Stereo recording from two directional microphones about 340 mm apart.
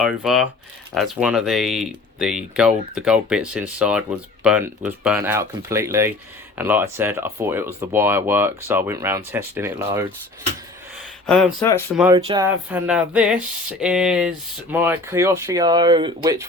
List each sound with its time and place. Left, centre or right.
0.0 s speech: centre
11.3 s speech: centre
12.1 s speech: centre